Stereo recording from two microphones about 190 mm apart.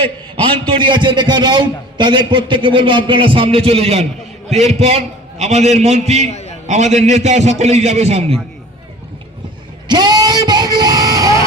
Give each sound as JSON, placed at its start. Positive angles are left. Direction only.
{"t": 0.8, "sound": "a man's voice", "side_deg": -25}
{"t": 9.9, "sound": "vehicle", "side_deg": -20}